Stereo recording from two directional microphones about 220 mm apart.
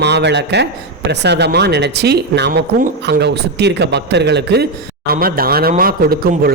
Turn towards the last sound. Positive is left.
turn(degrees=-40)  # may be behind; listen again after turning